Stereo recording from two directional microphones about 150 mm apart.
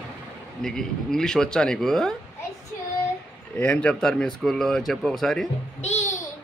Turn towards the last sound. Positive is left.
turn(degrees=50)  # may be behind; listen again after turning